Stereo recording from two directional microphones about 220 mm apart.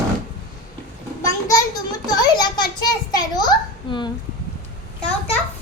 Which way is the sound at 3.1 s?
20° left (ahead or behind).